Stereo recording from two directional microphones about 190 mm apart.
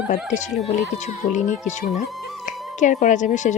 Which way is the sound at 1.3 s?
40° left (ahead or behind).